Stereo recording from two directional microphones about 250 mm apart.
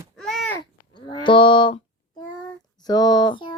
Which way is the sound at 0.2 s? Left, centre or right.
Centre.